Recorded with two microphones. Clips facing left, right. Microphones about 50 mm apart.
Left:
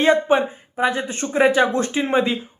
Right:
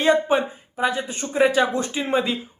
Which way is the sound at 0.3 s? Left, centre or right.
Centre.